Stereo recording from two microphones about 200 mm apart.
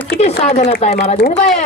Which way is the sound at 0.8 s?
30° left (ahead or behind).